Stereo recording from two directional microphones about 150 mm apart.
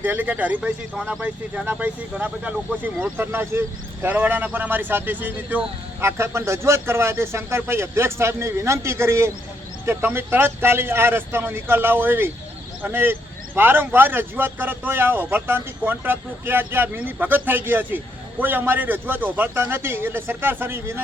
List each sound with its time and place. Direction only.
0.0 s speech: 10° right (ahead or behind)